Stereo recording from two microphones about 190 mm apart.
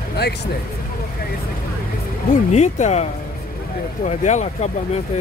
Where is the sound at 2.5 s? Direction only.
35° left (ahead or behind).